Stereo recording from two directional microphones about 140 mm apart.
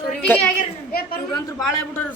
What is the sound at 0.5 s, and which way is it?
Speech, 90° left.